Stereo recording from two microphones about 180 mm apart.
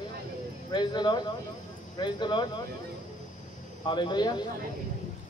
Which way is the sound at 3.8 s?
25° left (ahead or behind).